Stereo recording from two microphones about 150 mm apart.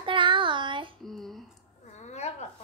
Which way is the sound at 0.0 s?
35° right (ahead or behind).